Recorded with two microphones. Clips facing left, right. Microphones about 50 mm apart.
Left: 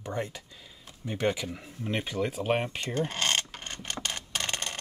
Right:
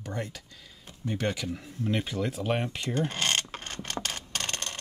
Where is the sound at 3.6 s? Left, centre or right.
Centre.